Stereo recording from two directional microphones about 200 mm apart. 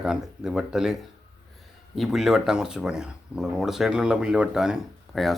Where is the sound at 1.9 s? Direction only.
Centre (ahead or behind).